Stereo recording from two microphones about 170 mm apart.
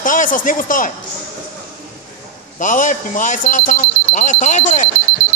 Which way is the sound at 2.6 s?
50° left (ahead or behind).